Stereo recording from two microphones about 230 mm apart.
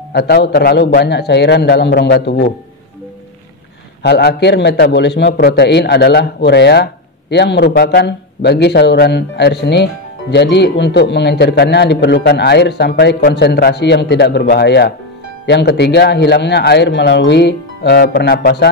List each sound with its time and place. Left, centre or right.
0.1 s a man's voice: left
4.0 s a man's voice: left